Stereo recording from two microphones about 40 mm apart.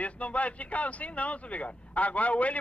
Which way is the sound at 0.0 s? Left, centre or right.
Left.